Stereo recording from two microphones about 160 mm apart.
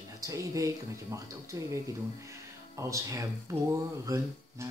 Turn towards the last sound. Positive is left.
turn(degrees=-20)  # may be behind; listen again after turning